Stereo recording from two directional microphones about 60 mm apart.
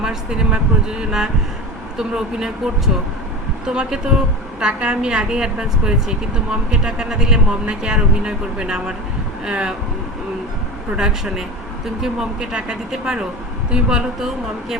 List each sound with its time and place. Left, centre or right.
0.0 s a woman's voice: centre
10.9 s a woman's voice: centre